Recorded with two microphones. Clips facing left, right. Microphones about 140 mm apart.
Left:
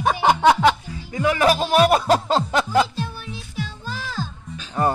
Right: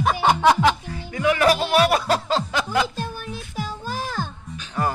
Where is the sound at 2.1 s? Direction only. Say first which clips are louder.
Left 3 dB; 45° left (ahead or behind).